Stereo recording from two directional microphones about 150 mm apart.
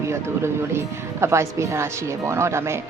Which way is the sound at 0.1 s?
15° right (ahead or behind).